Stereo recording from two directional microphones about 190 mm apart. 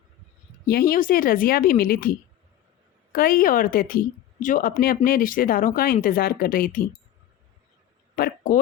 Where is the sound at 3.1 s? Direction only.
50° left (ahead or behind).